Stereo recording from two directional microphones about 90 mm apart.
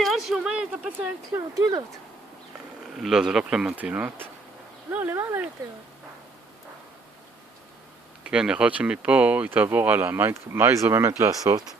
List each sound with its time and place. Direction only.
0.0 s a sound: centre (ahead or behind)
0.9 s speech: 20° right (ahead or behind)
1.5 s speech: 40° right (ahead or behind)
2.8 s speech: 5° right (ahead or behind); by 5.4 s 25° right (ahead or behind)
8.2 s speech: 10° right (ahead or behind); by 11.5 s 30° right (ahead or behind)